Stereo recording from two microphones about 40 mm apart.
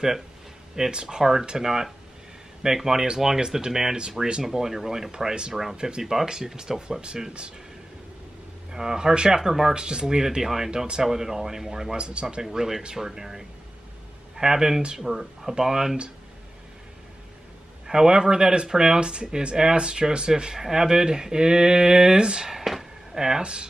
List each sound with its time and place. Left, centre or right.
0.7 s speech: centre
5.8 s speech: centre
8.7 s speech: centre
12.0 s speech: right
12.4 s speech: centre
17.8 s speech: centre
22.5 s a sound: centre
23.4 s speech: right